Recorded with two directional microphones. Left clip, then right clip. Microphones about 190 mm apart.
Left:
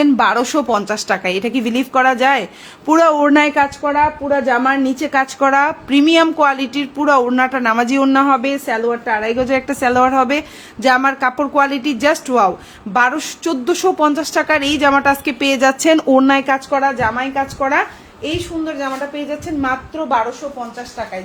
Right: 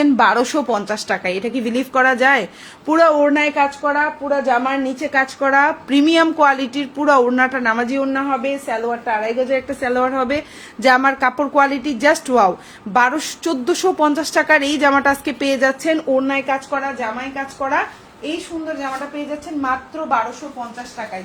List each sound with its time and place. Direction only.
0.0 s a woman's voice: 5° left (ahead or behind)
3.1 s a woman's voice: 40° left (ahead or behind); by 5.7 s 20° left (ahead or behind)
5.9 s a woman's voice: 5° left (ahead or behind)
7.9 s a woman's voice: 40° left (ahead or behind)
9.8 s a woman's voice: 20° left (ahead or behind)
10.8 s speech: centre (ahead or behind)
15.9 s a woman's voice: 40° left (ahead or behind)